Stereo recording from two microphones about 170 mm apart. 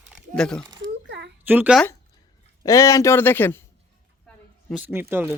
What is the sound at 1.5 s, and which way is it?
Speech, 10° right (ahead or behind).